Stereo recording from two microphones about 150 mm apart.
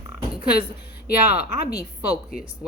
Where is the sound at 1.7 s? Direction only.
25° left (ahead or behind).